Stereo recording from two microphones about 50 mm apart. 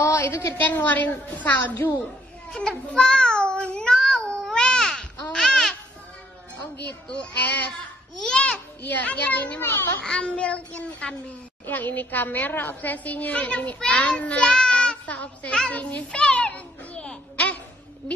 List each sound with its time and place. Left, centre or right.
0.3 s a woman's voice: left
0.6 s a woman's voice: left
1.6 s a woman's voice: left
2.9 s a sound: centre
7.3 s a woman's voice: left
8.2 s a child's voice: centre
8.9 s a woman's voice: left
9.6 s a child's voice: left
10.0 s a child's voice: left
11.6 s a woman's voice: left
16.1 s a sound: left